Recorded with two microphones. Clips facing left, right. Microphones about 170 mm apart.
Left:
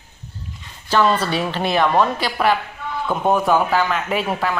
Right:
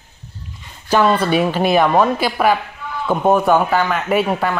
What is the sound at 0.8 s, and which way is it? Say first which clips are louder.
Speech: right 3 dB; 10° right (ahead or behind).